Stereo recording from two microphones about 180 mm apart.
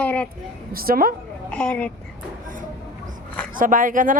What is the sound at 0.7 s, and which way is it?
Speech, 55° right (ahead or behind).